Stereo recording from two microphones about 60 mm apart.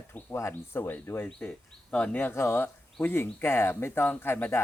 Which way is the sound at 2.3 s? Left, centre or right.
Left.